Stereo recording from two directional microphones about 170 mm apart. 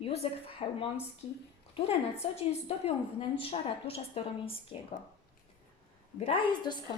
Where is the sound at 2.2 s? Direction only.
35° left (ahead or behind).